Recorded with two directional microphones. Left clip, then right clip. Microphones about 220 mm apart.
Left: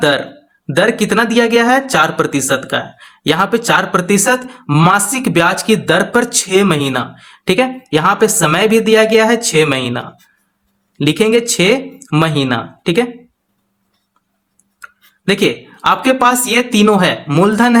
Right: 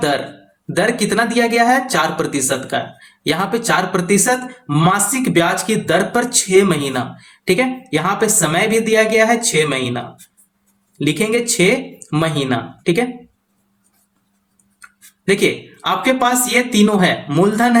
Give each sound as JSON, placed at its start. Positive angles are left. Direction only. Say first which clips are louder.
{"t": 0.7, "sound": "speech", "louder": "left 4 dB", "side_deg": 35}
{"t": 15.3, "sound": "speech", "louder": "left 2 dB", "side_deg": 35}